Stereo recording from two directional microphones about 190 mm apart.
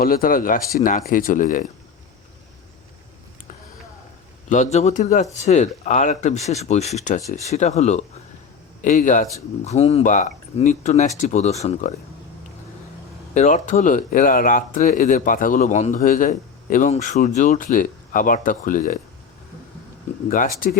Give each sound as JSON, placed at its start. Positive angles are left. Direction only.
{"t": 0.0, "sound": "speech", "side_deg": 50}
{"t": 4.4, "sound": "speech", "side_deg": 40}
{"t": 13.3, "sound": "speech", "side_deg": 40}